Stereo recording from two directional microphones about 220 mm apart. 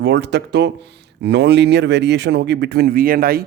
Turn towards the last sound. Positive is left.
turn(degrees=-40)  # may be behind; listen again after turning